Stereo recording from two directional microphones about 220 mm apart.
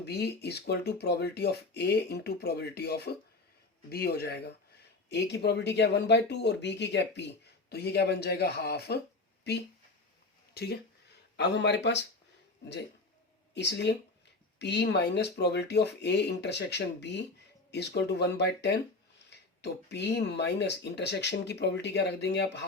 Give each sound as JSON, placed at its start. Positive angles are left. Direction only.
{"t": 0.0, "sound": "speech", "side_deg": 50}
{"t": 13.5, "sound": "speech", "side_deg": 50}